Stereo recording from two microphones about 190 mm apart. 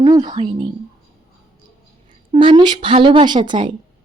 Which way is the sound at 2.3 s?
25° right (ahead or behind).